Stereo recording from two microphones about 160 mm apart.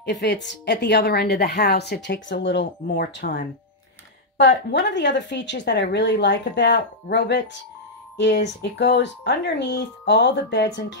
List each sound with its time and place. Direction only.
0.0 s a woman's voice: 90° left
4.4 s a woman's voice: 90° left
8.7 s a woman's voice: 90° left